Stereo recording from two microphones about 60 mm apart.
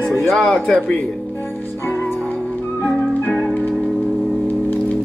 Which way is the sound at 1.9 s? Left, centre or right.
Left.